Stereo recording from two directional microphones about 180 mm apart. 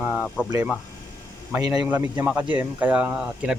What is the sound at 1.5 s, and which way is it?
Speech, 20° right (ahead or behind).